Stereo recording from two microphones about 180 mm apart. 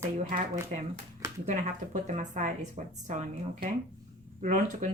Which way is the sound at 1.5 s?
45° right (ahead or behind).